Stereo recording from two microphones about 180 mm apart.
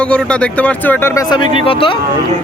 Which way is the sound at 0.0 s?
5° left (ahead or behind).